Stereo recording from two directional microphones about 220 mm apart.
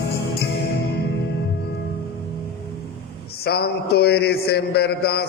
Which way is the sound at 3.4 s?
45° left (ahead or behind).